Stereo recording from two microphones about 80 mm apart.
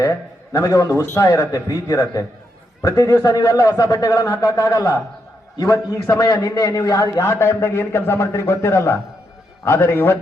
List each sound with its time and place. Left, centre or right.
0.0 s a man's voice: left